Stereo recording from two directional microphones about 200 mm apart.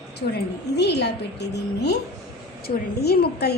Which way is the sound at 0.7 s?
55° left (ahead or behind).